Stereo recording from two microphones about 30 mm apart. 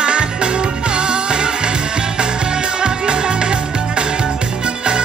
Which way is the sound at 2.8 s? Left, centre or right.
Right.